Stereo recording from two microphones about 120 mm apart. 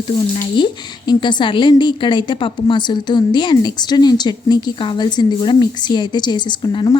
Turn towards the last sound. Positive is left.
turn(degrees=40)  # may be behind; listen again after turning